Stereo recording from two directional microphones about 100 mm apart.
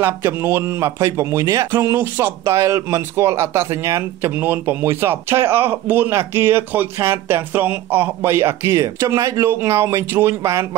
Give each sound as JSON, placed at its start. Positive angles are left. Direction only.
{"t": 0.0, "sound": "speech", "side_deg": -25}